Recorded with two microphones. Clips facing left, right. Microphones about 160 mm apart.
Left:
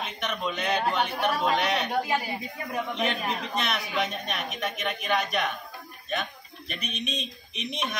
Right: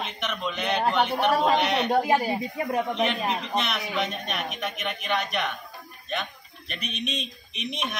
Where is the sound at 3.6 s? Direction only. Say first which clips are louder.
Right 1 dB; centre (ahead or behind).